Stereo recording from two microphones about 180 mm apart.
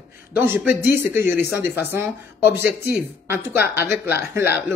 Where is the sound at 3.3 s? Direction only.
15° right (ahead or behind).